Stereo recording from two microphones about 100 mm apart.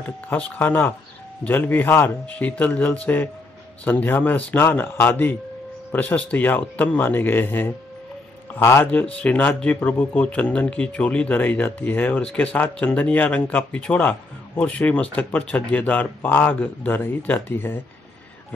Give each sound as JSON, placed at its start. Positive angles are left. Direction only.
{"t": 0.3, "sound": "speech", "side_deg": 20}
{"t": 8.9, "sound": "speech", "side_deg": 15}